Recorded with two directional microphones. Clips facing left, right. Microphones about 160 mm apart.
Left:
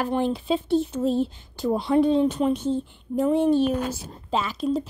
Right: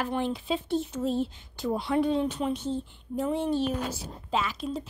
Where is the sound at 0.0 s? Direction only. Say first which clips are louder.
Left 5 dB; 35° left (ahead or behind).